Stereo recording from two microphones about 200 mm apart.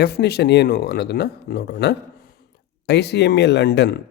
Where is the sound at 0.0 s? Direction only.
55° left (ahead or behind).